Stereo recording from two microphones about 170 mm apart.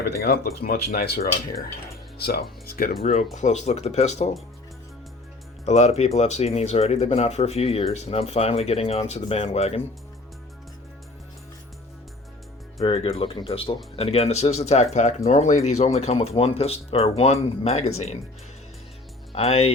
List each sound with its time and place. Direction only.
0.2 s speech: 60° left (ahead or behind)
3.0 s speech: 35° left (ahead or behind)
5.6 s speech: 40° left (ahead or behind)
12.8 s speech: 35° left (ahead or behind)
19.3 s speech: 35° left (ahead or behind)